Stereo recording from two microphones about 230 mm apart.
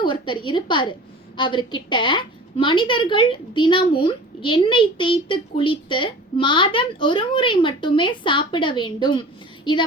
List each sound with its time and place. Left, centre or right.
0.0 s a woman's voice: left